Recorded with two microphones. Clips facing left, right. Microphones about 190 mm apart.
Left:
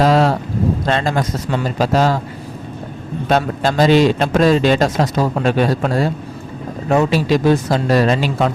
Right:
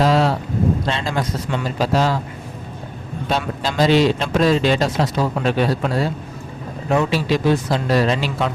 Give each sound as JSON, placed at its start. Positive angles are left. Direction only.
{"t": 0.0, "sound": "a man's voice", "side_deg": 45}
{"t": 3.2, "sound": "a man's voice", "side_deg": 55}